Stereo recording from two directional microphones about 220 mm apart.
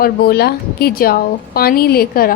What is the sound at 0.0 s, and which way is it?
A woman's voice, 45° left (ahead or behind).